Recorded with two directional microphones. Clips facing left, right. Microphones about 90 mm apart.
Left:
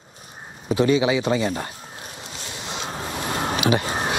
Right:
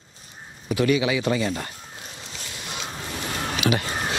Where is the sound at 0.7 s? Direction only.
25° left (ahead or behind).